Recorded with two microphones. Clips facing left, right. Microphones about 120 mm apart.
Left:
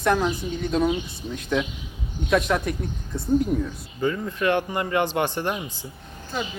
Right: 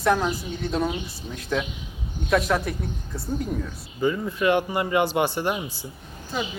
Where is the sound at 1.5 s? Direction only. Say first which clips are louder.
Left 1 dB; centre (ahead or behind).